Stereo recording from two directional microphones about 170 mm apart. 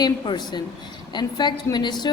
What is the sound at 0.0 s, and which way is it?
A woman's voice, 25° left (ahead or behind).